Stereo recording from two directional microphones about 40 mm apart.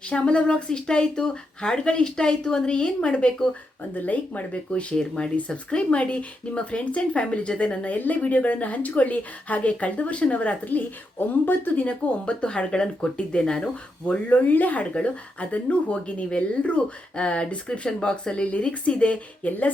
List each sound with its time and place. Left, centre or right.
0.1 s speech: left
3.9 s speech: left
4.9 s speech: left
7.9 s speech: left
11.8 s speech: left
14.1 s speech: left
19.4 s speech: left